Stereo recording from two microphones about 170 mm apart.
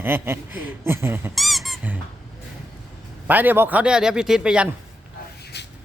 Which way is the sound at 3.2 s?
10° right (ahead or behind).